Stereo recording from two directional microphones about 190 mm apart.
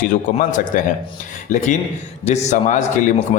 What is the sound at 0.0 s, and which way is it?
A man's voice, 45° left (ahead or behind).